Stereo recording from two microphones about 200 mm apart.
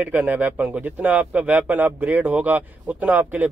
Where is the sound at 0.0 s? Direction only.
10° right (ahead or behind).